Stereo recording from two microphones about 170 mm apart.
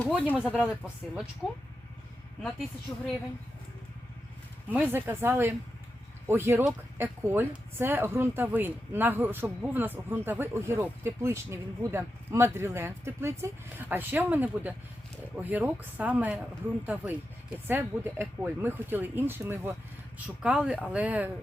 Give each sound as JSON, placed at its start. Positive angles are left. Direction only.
{"t": 0.0, "sound": "speech", "side_deg": -5}
{"t": 2.9, "sound": "a woman's voice", "side_deg": 20}
{"t": 4.7, "sound": "speech", "side_deg": -10}